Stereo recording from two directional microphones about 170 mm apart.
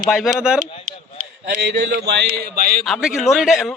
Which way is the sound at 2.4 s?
60° right (ahead or behind).